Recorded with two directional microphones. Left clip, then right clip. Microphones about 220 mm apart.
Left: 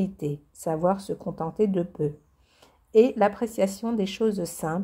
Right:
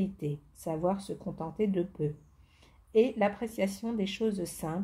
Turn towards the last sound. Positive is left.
turn(degrees=30)  # may be behind; listen again after turning